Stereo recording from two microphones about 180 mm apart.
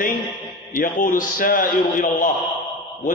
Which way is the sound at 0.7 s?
50° left (ahead or behind).